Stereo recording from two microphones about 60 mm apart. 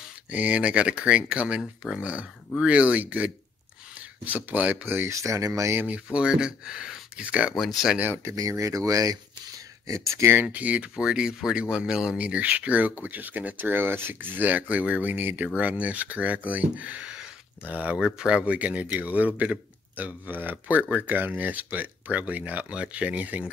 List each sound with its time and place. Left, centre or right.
0.3 s speech: right
4.5 s speech: right
5.1 s speech: right
6.1 s speech: centre
7.5 s speech: centre
8.2 s speech: right
9.8 s speech: right
10.3 s speech: right
17.9 s speech: centre